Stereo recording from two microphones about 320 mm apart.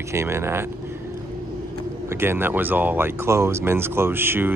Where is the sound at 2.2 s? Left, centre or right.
Centre.